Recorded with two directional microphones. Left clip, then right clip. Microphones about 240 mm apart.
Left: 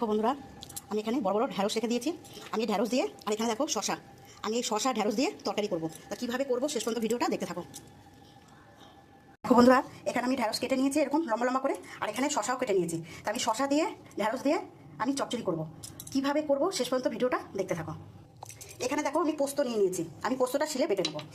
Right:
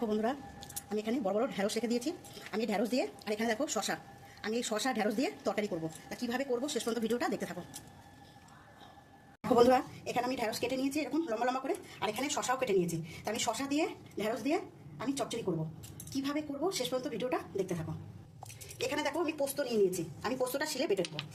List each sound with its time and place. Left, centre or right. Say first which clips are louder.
0.0 s speech: left 5 dB; centre
9.6 s speech: left 3 dB; centre
18.9 s speech: left 5 dB; centre